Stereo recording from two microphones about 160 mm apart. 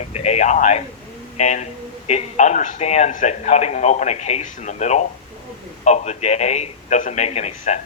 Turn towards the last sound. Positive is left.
turn(degrees=45)  # may be behind; listen again after turning